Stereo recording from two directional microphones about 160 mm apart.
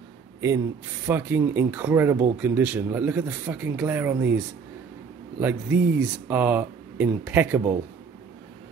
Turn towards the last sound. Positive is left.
turn(degrees=-10)  # may be behind; listen again after turning